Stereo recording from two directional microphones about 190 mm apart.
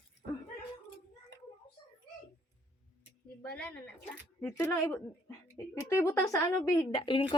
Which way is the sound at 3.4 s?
5° left (ahead or behind).